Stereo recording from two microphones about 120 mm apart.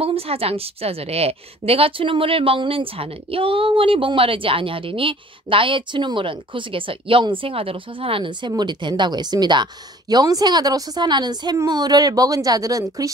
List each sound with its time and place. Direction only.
0.0 s a woman's voice: 55° right (ahead or behind); by 13.1 s 30° right (ahead or behind)